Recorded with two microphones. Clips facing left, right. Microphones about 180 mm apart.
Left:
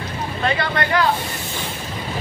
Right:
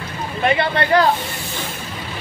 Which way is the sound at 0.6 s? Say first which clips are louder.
Right 6 dB; 30° right (ahead or behind).